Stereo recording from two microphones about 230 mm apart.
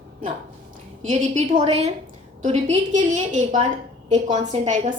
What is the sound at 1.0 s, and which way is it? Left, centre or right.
A woman's voice, right.